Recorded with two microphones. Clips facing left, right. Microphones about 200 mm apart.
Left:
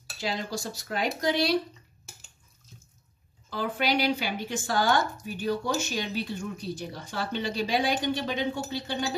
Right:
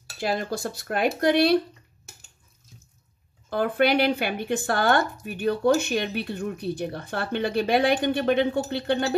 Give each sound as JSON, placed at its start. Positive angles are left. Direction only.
{"t": 0.2, "sound": "speech", "side_deg": -55}
{"t": 3.4, "sound": "speech", "side_deg": -55}